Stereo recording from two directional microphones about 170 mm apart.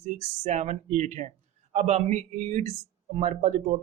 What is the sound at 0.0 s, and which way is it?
Speech, 45° right (ahead or behind).